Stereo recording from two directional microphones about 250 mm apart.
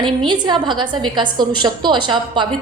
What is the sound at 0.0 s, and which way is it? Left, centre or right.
A woman's voice, centre.